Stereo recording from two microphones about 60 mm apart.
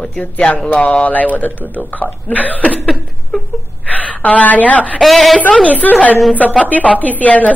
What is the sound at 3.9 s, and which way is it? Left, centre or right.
A woman's voice, left.